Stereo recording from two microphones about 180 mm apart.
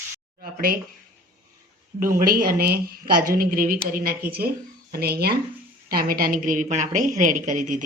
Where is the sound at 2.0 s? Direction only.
50° right (ahead or behind).